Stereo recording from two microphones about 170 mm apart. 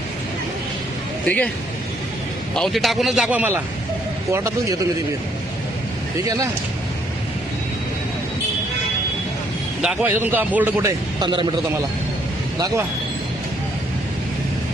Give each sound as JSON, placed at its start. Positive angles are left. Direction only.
{"t": 1.2, "sound": "speech", "side_deg": 10}
{"t": 2.6, "sound": "a man's voice", "side_deg": 0}
{"t": 6.2, "sound": "a man's voice", "side_deg": -20}
{"t": 9.8, "sound": "a man's voice", "side_deg": -5}
{"t": 11.2, "sound": "a man's voice", "side_deg": -25}